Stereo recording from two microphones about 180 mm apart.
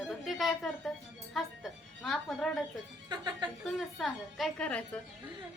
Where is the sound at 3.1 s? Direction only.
25° right (ahead or behind).